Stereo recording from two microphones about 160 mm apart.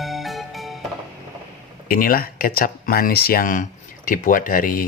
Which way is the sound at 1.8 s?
65° left (ahead or behind).